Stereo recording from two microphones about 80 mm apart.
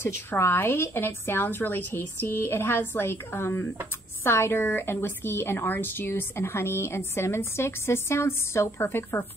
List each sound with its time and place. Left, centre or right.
0.0 s a woman's voice: left